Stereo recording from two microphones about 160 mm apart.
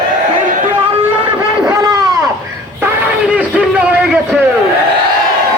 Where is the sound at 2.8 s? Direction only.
10° right (ahead or behind).